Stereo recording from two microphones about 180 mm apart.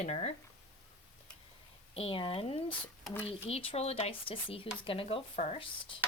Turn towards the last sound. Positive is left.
turn(degrees=30)  # may be behind; listen again after turning